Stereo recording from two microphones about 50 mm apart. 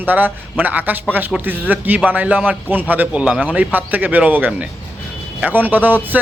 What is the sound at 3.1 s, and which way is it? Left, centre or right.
Speech, right.